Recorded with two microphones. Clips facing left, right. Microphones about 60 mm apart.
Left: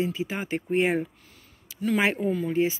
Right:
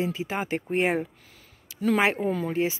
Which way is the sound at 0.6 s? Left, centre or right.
Right.